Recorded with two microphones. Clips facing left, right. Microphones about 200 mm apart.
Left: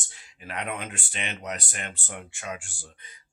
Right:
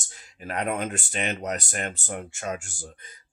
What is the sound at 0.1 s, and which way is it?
Speech, 45° right (ahead or behind).